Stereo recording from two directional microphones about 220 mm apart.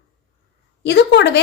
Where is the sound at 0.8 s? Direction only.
50° left (ahead or behind).